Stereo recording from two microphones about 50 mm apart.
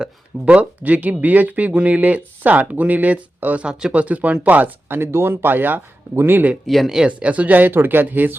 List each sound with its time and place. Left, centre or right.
0.4 s speech: right
3.7 s speech: centre
3.9 s speech: right
4.9 s speech: right
6.7 s speech: centre
7.1 s speech: right